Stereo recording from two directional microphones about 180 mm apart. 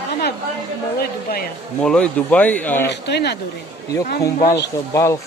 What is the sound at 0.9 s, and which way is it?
Speech, 60° left (ahead or behind).